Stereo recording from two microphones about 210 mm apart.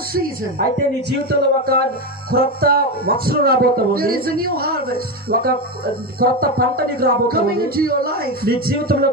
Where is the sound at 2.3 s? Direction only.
45° right (ahead or behind).